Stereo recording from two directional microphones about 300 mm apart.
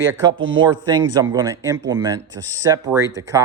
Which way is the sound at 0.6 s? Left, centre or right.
Centre.